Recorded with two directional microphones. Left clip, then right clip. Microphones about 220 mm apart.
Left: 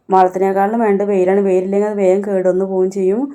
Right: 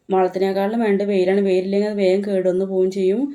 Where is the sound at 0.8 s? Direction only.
40° left (ahead or behind).